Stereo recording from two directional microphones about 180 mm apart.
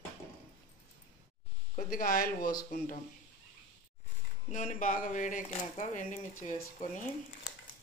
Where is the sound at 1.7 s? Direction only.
50° left (ahead or behind).